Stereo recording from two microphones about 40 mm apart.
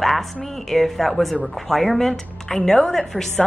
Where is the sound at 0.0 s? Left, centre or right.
Centre.